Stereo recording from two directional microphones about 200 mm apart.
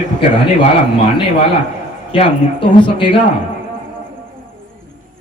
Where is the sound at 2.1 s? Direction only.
25° left (ahead or behind).